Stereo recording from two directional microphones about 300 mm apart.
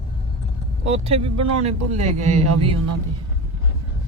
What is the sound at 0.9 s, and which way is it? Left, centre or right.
Speech, centre.